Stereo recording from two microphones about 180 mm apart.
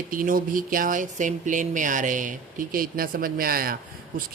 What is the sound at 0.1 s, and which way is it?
Speech, 50° right (ahead or behind).